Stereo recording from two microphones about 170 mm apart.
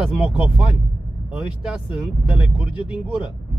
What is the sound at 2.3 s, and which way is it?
Speech, 5° right (ahead or behind).